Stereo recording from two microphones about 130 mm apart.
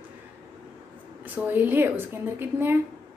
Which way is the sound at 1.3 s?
15° right (ahead or behind).